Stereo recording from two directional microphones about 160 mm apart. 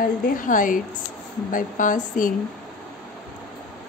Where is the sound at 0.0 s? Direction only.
60° left (ahead or behind).